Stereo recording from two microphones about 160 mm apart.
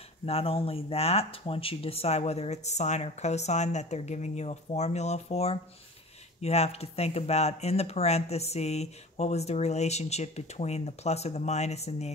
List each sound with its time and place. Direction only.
0.2 s speech: 40° left (ahead or behind)